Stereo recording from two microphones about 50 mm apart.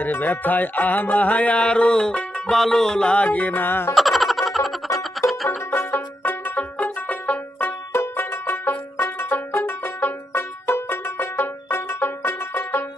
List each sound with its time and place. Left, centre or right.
0.0 s music: left; by 2.5 s centre
2.5 s music: centre
3.2 s music: left
3.9 s music: centre
6.2 s banjo: left
7.9 s banjo: left